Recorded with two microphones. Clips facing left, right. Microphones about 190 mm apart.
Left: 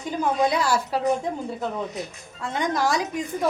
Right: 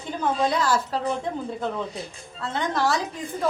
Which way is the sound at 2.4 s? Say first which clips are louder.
Left 1 dB; 15° left (ahead or behind).